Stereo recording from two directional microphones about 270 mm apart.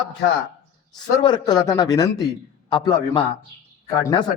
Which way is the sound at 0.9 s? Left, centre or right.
Centre.